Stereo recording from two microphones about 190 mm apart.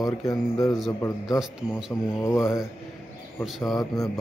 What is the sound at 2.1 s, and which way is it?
Mantra, 15° left (ahead or behind).